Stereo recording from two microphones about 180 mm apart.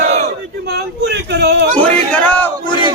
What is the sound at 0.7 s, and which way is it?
Speech, 65° right (ahead or behind).